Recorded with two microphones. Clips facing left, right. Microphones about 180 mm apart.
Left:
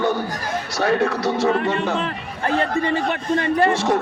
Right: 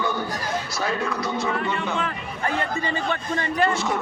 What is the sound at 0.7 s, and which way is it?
Speech, 70° left (ahead or behind).